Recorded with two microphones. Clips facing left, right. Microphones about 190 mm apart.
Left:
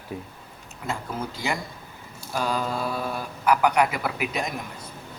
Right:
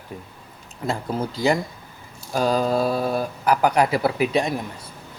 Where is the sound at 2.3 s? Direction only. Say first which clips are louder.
Right 7 dB; 40° right (ahead or behind).